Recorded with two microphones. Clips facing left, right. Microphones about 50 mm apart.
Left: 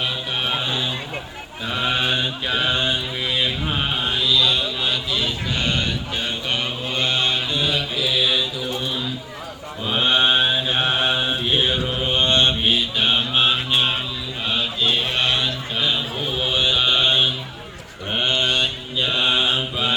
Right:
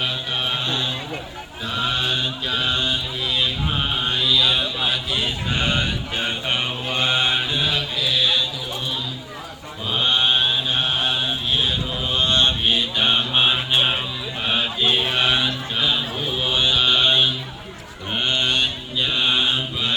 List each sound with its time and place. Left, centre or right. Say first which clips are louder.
0.4 s a sound: left 1 dB; centre
1.9 s mantra: left 2 dB; left
3.7 s mantra: even; centre
5.1 s a sound: even; right
6.1 s mantra: right 3 dB; right
7.6 s mantra: left 1 dB; centre
9.9 s mantra: left 2 dB; centre
12.6 s mantra: even; centre
14.4 s a sound: right 1 dB; right; by 16.6 s centre
16.6 s mantra: right 1 dB; centre